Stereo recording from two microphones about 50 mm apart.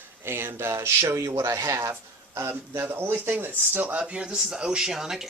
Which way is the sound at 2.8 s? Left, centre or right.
Right.